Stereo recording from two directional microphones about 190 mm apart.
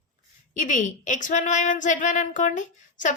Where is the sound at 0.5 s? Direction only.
40° left (ahead or behind).